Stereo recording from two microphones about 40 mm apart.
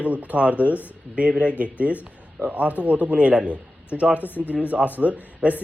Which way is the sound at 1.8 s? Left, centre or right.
Left.